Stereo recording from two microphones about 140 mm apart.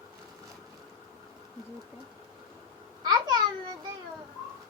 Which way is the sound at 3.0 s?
30° right (ahead or behind).